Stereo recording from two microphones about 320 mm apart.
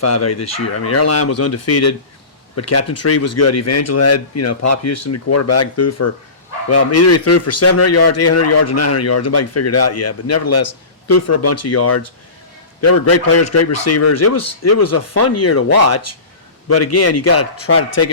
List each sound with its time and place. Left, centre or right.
0.0 s a man's voice: left